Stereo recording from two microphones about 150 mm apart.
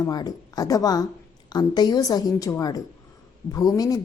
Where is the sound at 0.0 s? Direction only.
25° left (ahead or behind).